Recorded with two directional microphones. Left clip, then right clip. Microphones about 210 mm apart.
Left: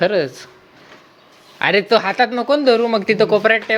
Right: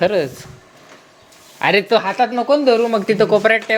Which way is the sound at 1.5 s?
5° left (ahead or behind).